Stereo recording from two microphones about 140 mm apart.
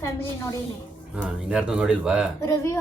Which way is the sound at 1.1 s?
5° right (ahead or behind).